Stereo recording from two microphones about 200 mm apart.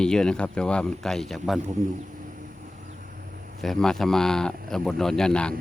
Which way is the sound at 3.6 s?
Centre (ahead or behind).